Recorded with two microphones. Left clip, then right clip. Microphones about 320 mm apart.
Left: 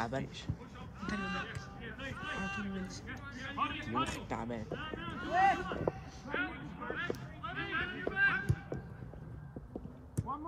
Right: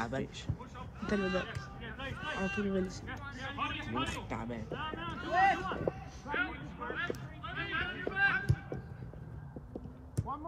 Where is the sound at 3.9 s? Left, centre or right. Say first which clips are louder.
Left 1 dB; centre.